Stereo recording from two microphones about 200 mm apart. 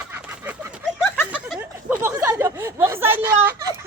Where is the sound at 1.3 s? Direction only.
5° right (ahead or behind).